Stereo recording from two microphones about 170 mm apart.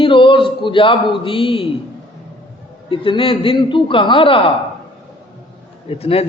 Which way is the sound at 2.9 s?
30° left (ahead or behind).